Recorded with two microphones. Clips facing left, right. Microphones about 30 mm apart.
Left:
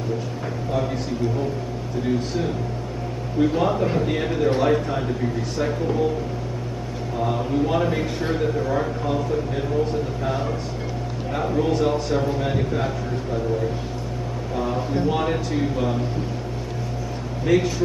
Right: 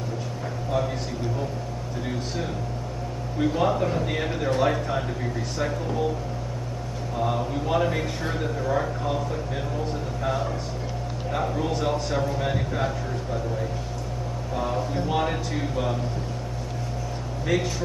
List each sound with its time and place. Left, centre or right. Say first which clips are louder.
2.0 s a man's voice: left 7 dB; centre
7.2 s a man's voice: left 4 dB; centre
14.5 s a man's voice: left 2 dB; centre
14.8 s speech: left 4 dB; centre
15.0 s a man's voice: left 3 dB; centre
17.5 s a man's voice: left 6 dB; centre